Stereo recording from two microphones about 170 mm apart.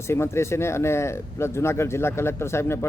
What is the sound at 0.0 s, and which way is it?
Speech, 15° left (ahead or behind).